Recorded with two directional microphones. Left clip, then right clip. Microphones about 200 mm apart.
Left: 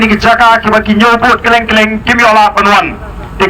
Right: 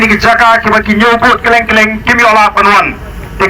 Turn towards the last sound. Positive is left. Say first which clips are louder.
# even
turn(degrees=-10)  # may be behind; listen again after turning